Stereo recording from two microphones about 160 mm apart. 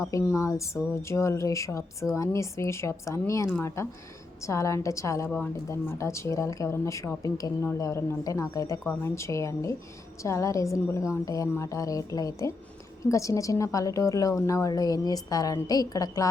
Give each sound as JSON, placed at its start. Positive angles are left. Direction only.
{"t": 0.1, "sound": "a woman's voice", "side_deg": 15}